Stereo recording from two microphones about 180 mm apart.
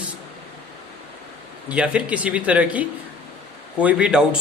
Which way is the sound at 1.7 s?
5° right (ahead or behind).